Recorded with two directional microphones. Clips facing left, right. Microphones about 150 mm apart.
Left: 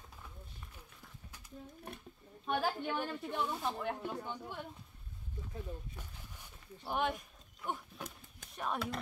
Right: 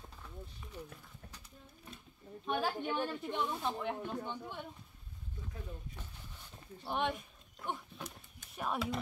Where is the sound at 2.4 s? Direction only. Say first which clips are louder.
Even; centre (ahead or behind).